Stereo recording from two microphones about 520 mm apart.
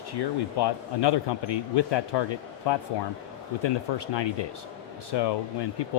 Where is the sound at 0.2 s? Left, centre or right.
Left.